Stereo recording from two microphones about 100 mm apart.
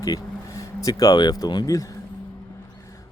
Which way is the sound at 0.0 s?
35° left (ahead or behind).